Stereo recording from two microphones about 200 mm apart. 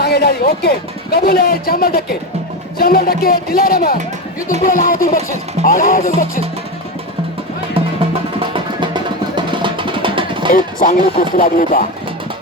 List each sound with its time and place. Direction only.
0.0 s speech: 55° left (ahead or behind)
1.1 s music: 50° left (ahead or behind)
8.4 s music: 25° right (ahead or behind)
10.5 s music: 45° left (ahead or behind)